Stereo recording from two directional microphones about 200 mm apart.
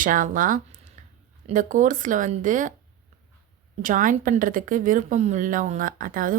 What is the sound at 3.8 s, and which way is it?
A woman's voice, 40° right (ahead or behind).